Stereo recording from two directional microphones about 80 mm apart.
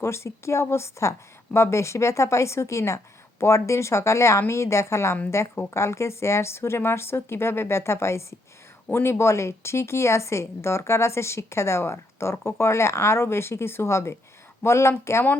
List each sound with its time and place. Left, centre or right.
0.0 s speech: left